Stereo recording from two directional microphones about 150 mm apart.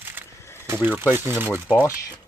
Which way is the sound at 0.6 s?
15° right (ahead or behind).